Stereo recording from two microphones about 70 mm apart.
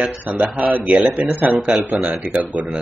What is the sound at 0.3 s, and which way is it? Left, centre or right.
Speech, right.